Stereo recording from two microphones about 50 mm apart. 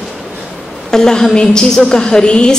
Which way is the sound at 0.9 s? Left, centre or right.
Centre.